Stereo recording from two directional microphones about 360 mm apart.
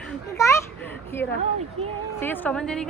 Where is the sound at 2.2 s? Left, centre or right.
Centre.